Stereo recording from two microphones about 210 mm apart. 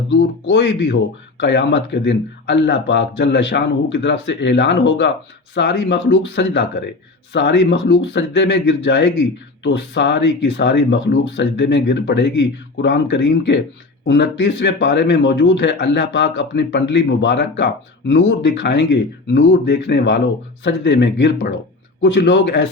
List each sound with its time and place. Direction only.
0.1 s speech: 60° left (ahead or behind)